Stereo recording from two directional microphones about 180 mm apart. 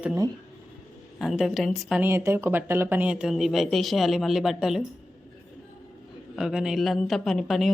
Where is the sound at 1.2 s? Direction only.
Centre (ahead or behind).